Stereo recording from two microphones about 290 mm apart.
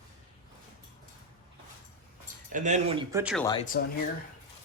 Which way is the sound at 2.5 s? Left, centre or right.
Right.